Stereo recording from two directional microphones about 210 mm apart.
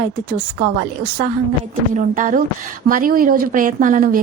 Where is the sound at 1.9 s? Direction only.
40° right (ahead or behind).